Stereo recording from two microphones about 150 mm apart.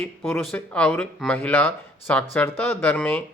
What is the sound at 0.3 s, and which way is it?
Speech, 10° left (ahead or behind).